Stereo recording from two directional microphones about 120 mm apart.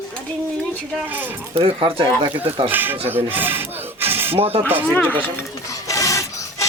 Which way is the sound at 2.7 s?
15° right (ahead or behind).